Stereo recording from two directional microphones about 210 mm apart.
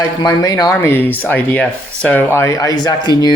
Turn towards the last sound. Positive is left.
turn(degrees=20)  # may be behind; listen again after turning